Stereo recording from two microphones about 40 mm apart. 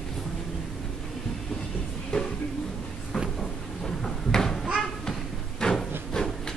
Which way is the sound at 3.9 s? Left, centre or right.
Centre.